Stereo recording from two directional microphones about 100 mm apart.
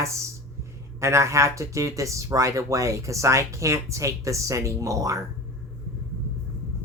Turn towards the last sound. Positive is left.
turn(degrees=-35)  # may be behind; listen again after turning